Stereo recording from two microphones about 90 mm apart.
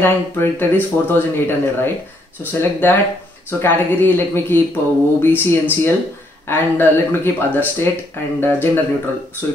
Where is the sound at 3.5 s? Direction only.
20° left (ahead or behind).